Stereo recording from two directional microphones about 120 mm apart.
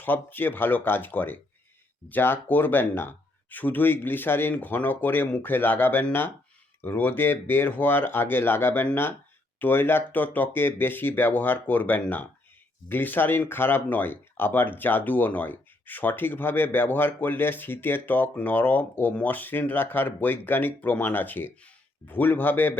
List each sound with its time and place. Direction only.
0.0 s speech: 15° left (ahead or behind)